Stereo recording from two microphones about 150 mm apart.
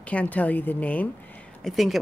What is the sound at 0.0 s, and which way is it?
A woman's voice, 10° left (ahead or behind).